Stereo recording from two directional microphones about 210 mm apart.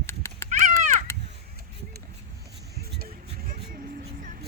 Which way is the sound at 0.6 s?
35° right (ahead or behind).